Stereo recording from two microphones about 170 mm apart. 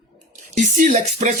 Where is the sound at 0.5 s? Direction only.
45° right (ahead or behind).